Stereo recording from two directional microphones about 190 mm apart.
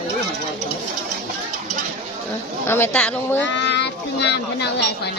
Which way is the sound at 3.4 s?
65° left (ahead or behind).